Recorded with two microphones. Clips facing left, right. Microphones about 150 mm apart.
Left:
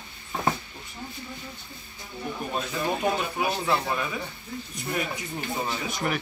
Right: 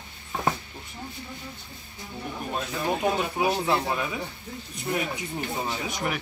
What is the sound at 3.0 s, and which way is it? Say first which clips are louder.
Speech: right 4 dB; 15° right (ahead or behind).